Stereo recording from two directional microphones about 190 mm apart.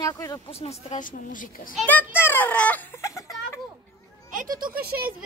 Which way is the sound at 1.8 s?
10° left (ahead or behind).